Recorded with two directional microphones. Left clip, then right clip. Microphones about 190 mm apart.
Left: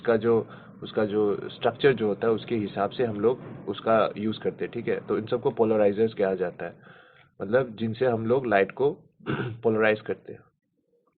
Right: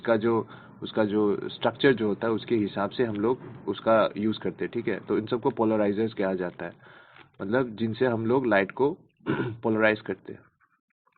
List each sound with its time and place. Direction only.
0.0 s speech: 45° right (ahead or behind)